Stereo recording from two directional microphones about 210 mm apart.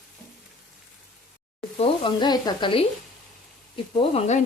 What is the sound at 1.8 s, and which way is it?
Sizzle, 20° left (ahead or behind).